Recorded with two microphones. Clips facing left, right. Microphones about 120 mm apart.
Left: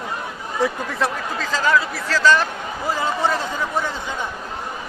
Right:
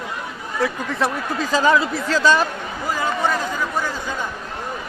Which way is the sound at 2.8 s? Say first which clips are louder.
Even; 25° left (ahead or behind).